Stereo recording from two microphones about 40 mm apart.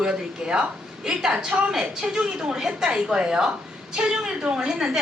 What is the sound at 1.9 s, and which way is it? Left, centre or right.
A woman's voice, centre.